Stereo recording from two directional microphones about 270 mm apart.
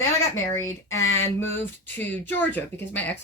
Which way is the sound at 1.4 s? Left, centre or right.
Centre.